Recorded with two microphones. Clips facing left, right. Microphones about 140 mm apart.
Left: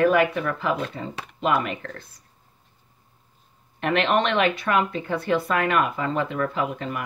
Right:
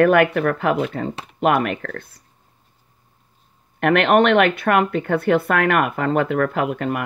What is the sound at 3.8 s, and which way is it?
Speech, 60° right (ahead or behind).